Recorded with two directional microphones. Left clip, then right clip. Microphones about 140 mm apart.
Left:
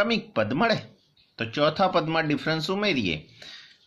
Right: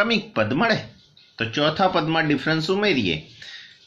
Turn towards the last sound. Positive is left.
turn(degrees=45)  # may be behind; listen again after turning